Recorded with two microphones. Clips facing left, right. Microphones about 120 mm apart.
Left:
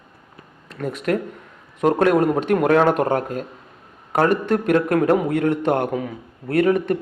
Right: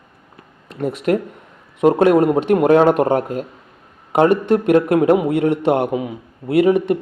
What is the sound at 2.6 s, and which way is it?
Speech, 25° right (ahead or behind).